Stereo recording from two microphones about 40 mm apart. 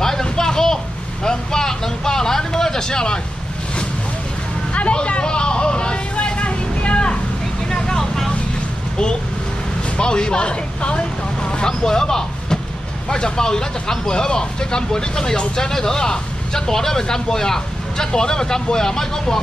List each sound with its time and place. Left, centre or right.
0.0 s a sound: centre
1.2 s vehicle: centre
4.7 s vehicle: left
7.7 s vehicle: centre
9.9 s speech: left